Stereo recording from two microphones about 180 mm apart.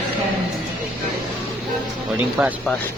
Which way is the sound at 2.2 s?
10° right (ahead or behind).